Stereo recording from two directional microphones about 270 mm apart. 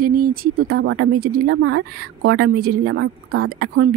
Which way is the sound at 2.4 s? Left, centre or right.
Right.